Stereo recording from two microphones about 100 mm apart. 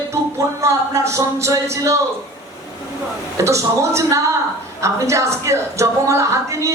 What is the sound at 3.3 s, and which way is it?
A woman's voice, 30° right (ahead or behind).